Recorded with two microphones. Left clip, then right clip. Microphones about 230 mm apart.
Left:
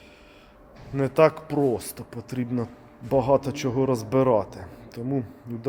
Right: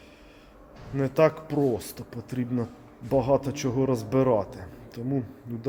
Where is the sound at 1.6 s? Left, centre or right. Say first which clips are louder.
Left 2 dB; centre.